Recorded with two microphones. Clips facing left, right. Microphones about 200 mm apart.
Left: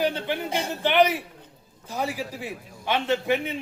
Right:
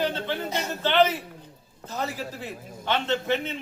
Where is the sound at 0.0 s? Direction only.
15° left (ahead or behind).